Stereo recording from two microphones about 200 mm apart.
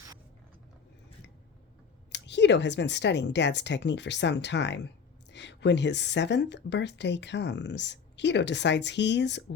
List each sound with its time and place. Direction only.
2.1 s speech: 60° left (ahead or behind)